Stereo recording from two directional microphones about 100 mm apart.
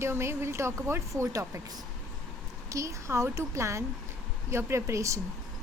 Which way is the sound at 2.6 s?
30° right (ahead or behind).